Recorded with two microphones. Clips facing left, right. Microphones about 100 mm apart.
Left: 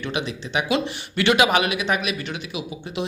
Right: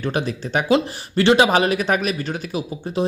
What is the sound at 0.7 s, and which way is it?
Speech, 30° right (ahead or behind).